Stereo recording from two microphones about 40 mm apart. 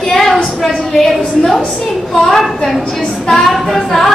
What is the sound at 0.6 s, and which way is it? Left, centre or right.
A woman's voice, centre.